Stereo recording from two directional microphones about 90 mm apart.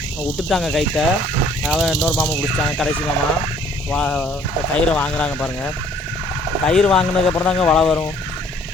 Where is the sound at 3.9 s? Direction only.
10° left (ahead or behind).